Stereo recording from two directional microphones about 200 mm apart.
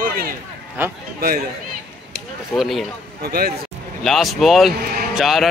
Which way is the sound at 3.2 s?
50° right (ahead or behind).